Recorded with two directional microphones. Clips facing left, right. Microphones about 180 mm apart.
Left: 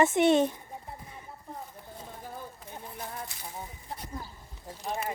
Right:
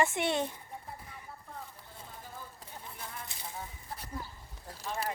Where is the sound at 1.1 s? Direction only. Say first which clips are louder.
Left 4 dB; 25° left (ahead or behind).